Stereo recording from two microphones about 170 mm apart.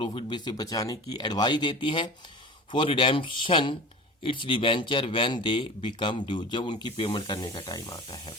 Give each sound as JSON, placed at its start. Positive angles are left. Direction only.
{"t": 0.1, "sound": "speech", "side_deg": 30}